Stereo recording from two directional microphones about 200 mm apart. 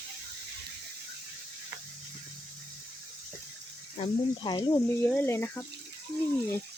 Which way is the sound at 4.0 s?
20° left (ahead or behind).